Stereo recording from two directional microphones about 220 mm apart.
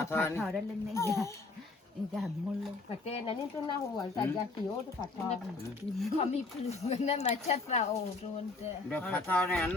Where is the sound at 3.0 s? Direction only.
30° left (ahead or behind).